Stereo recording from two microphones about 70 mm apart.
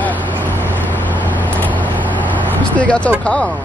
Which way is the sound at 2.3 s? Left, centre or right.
Centre.